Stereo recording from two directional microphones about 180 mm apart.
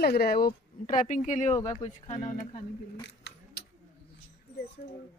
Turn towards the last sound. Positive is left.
turn(degrees=70)  # may be behind; listen again after turning